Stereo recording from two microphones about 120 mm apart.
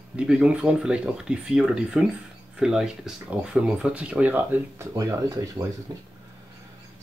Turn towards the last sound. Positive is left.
turn(degrees=-25)  # may be behind; listen again after turning